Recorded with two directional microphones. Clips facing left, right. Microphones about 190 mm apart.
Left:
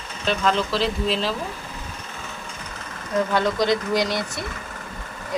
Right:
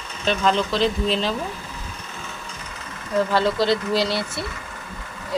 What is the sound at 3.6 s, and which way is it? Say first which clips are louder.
Speech: right 1 dB; 15° left (ahead or behind).